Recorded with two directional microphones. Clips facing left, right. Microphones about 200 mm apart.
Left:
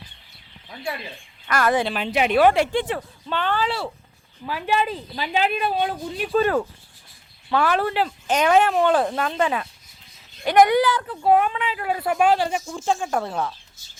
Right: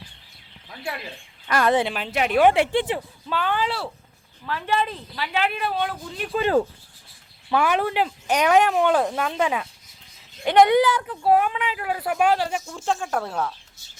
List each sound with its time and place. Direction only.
1.5 s speech: 20° right (ahead or behind)
1.9 s speech: centre (ahead or behind)
2.4 s speech: 20° right (ahead or behind)
3.2 s speech: 5° right (ahead or behind)
4.4 s speech: 10° left (ahead or behind)
6.4 s speech: 20° right (ahead or behind)
10.4 s speech: 25° right (ahead or behind)
11.3 s speech: 5° right (ahead or behind)
13.2 s speech: 5° right (ahead or behind)